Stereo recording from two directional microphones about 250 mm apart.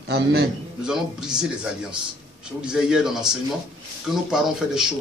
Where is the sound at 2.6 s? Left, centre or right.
Centre.